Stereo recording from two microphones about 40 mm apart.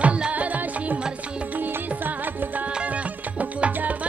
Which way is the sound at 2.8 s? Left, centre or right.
Right.